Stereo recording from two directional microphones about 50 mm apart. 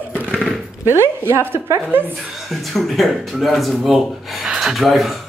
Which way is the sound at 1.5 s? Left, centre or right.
Right.